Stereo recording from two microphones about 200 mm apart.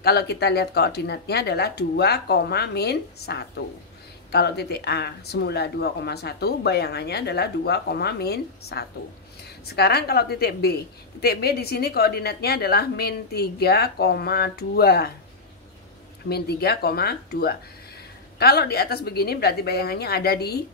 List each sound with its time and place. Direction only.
0.0 s a woman's voice: 55° left (ahead or behind)
16.3 s a woman's voice: 50° left (ahead or behind)